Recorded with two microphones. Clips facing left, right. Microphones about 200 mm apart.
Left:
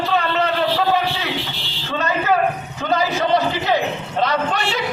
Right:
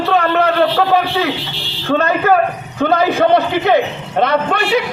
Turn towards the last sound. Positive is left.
turn(degrees=-60)  # may be behind; listen again after turning